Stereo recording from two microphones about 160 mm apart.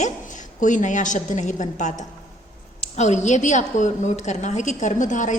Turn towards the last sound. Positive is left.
turn(degrees=50)  # may be behind; listen again after turning